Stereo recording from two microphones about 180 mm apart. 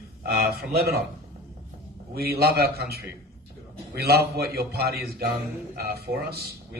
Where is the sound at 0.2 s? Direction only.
55° right (ahead or behind).